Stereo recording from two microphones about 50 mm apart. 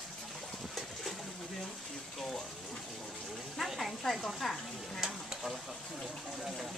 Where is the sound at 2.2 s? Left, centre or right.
Centre.